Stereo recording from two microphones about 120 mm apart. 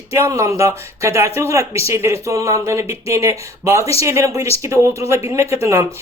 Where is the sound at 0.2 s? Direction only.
25° right (ahead or behind).